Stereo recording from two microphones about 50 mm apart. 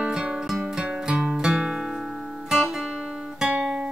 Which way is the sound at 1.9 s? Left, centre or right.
Centre.